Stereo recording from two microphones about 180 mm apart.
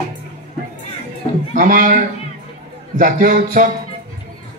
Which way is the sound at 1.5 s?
50° right (ahead or behind).